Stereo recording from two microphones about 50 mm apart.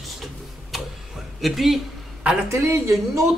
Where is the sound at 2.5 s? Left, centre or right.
Right.